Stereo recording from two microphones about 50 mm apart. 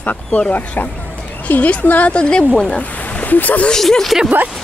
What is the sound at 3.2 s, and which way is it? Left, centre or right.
Speech, left.